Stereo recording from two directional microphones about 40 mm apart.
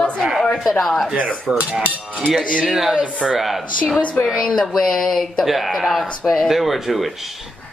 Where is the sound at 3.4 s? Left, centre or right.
Centre.